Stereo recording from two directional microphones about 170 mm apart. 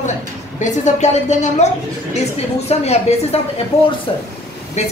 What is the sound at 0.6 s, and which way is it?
A woman's voice, 45° left (ahead or behind).